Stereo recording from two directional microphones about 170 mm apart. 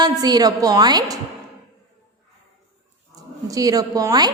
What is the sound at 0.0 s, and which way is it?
A woman's voice, 25° right (ahead or behind).